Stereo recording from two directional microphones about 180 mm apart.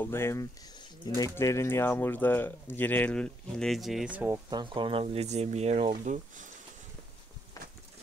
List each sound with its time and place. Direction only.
0.0 s speech: 15° left (ahead or behind); by 4.4 s 10° right (ahead or behind)
4.5 s speech: 25° right (ahead or behind); by 6.5 s 40° right (ahead or behind)